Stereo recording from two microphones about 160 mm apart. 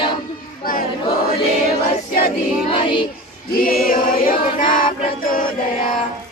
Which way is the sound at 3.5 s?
65° left (ahead or behind).